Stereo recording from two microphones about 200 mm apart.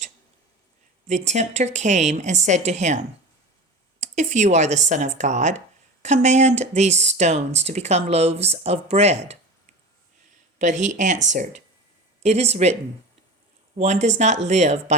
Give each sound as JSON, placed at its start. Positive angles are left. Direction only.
{"t": 1.0, "sound": "speech", "side_deg": -35}
{"t": 4.0, "sound": "speech", "side_deg": -35}
{"t": 10.6, "sound": "speech", "side_deg": -40}
{"t": 13.7, "sound": "speech", "side_deg": -35}